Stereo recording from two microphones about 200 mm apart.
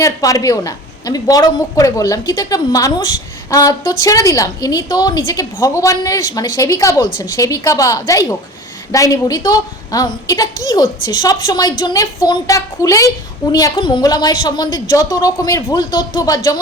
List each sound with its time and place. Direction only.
0.0 s a woman's voice: 15° left (ahead or behind)